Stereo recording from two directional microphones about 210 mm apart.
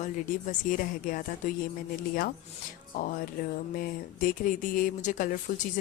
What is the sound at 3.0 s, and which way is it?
Speech, 40° left (ahead or behind).